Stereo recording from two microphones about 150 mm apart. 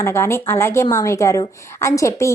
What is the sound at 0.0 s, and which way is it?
A woman's voice, 15° left (ahead or behind).